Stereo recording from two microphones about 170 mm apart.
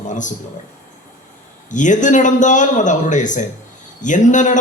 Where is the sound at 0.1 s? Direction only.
45° left (ahead or behind).